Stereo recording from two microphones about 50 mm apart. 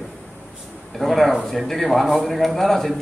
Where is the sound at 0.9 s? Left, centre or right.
Centre.